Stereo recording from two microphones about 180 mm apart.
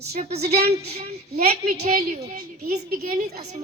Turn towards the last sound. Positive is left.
turn(degrees=-45)  # may be behind; listen again after turning